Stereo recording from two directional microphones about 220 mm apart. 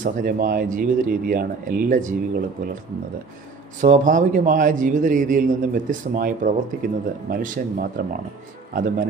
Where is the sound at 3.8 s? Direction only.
35° right (ahead or behind).